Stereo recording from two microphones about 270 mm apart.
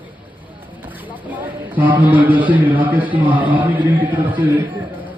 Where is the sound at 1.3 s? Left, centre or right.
Centre.